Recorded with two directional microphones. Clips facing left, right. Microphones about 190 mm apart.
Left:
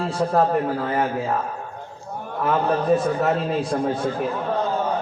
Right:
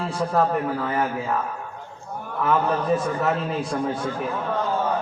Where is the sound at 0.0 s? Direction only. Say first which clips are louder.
Left 2 dB; 35° left (ahead or behind).